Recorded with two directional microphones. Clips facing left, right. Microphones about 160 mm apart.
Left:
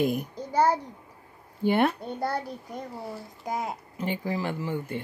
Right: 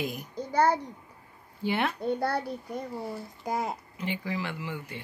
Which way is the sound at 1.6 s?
50° left (ahead or behind).